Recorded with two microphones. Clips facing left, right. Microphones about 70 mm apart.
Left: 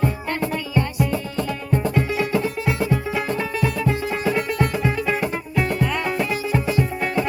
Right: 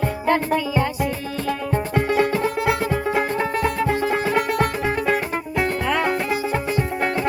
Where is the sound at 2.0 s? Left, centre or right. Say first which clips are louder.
Right 6 dB; right.